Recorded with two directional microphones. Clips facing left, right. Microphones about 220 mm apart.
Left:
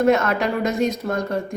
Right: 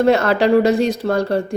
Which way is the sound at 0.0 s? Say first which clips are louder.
Right 4 dB; 30° right (ahead or behind).